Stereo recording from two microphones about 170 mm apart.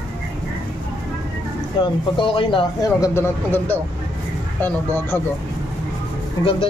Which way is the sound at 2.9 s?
15° left (ahead or behind).